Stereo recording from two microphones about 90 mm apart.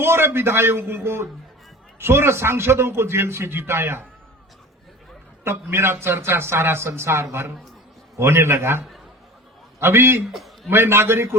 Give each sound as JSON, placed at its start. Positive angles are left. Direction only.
{"t": 0.0, "sound": "a man's voice", "side_deg": -25}
{"t": 5.7, "sound": "a man's voice", "side_deg": -25}
{"t": 10.3, "sound": "a sound", "side_deg": 0}
{"t": 10.7, "sound": "a man's voice", "side_deg": -25}